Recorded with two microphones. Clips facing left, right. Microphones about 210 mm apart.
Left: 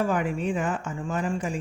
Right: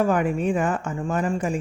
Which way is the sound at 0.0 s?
50° right (ahead or behind).